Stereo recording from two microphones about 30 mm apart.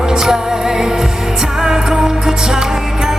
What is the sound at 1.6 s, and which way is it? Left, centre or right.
Music, centre.